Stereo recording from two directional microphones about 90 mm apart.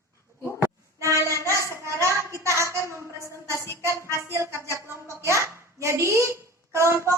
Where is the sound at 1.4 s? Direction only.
35° right (ahead or behind).